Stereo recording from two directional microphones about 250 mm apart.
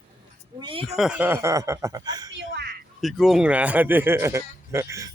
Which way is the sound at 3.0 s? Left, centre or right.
Centre.